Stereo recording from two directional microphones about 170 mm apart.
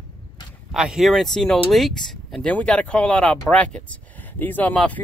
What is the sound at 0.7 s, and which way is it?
Speech, 5° right (ahead or behind).